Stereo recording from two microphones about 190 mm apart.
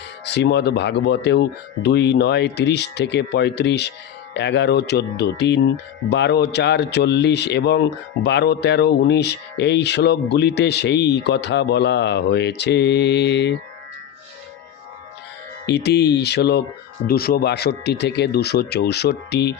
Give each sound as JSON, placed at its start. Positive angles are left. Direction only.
{"t": 0.3, "sound": "speech", "side_deg": 65}
{"t": 15.6, "sound": "speech", "side_deg": 60}